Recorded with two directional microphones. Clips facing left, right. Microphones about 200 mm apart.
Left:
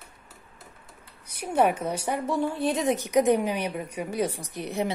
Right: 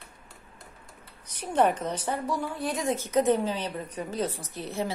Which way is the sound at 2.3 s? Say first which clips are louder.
Left 5 dB; 25° left (ahead or behind).